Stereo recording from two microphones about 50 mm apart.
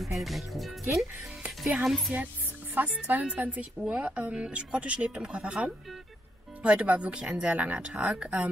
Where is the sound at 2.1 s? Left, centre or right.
Right.